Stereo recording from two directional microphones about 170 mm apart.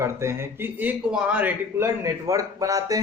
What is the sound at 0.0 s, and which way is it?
A man's voice, 15° right (ahead or behind).